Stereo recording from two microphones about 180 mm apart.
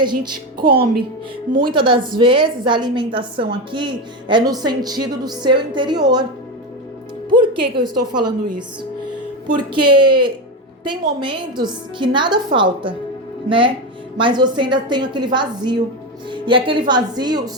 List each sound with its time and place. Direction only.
0.0 s a woman's voice: 25° right (ahead or behind)
7.3 s a woman's voice: 25° right (ahead or behind)
9.8 s a woman's voice: 25° right (ahead or behind)